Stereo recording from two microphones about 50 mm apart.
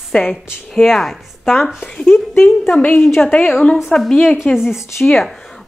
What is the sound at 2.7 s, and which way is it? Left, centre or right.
A woman's voice, left.